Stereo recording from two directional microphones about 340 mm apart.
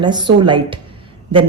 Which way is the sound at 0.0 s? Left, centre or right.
Centre.